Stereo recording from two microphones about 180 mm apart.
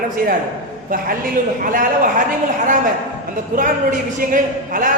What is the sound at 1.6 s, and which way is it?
Speech, 50° right (ahead or behind).